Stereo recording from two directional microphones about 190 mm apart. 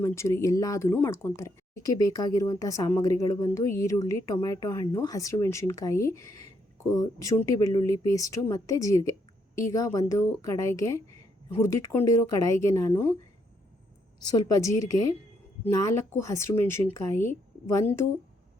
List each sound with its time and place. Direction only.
0.0 s speech: 15° left (ahead or behind)
14.2 s a woman's voice: 20° left (ahead or behind)
15.7 s speech: 15° left (ahead or behind)